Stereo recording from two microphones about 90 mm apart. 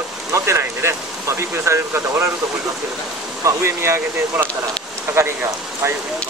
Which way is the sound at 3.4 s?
30° right (ahead or behind).